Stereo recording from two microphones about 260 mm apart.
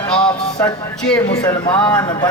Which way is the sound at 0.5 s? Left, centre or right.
Centre.